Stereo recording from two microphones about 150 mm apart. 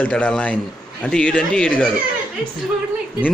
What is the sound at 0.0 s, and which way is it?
Speech, 10° left (ahead or behind).